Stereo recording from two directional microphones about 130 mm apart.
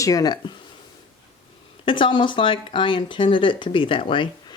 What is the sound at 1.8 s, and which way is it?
Speech, 40° left (ahead or behind).